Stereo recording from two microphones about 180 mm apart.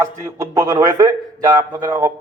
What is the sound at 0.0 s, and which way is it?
A man's voice, 15° right (ahead or behind).